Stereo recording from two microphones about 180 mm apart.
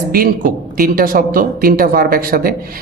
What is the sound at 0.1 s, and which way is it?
Speech, 55° right (ahead or behind).